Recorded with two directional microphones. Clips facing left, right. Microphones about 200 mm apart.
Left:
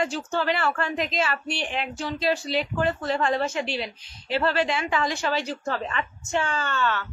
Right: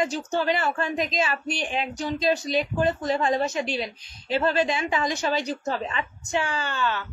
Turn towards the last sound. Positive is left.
turn(degrees=-15)  # may be behind; listen again after turning